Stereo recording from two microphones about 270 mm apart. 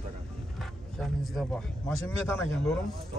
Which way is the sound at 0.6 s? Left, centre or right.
Centre.